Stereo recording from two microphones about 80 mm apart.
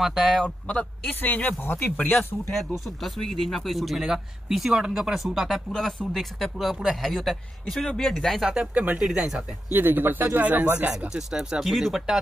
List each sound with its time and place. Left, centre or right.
0.0 s speech: centre
0.7 s a man's voice: centre
2.5 s speech: centre
9.7 s speech: right; by 12.2 s centre